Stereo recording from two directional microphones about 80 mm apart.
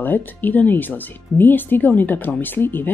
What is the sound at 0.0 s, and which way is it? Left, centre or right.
Speech, left.